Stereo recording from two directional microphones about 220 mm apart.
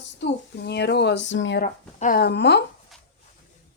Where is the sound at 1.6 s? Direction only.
40° left (ahead or behind).